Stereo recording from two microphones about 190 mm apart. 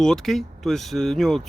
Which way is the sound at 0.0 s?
Centre (ahead or behind).